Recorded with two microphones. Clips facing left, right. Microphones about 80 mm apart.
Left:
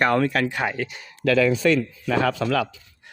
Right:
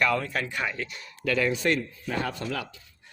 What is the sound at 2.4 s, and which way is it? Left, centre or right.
Speech, left.